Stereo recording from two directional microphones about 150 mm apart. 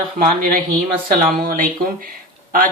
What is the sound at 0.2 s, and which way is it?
Speech, 75° right (ahead or behind).